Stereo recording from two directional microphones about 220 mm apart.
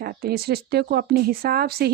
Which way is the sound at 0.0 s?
45° right (ahead or behind).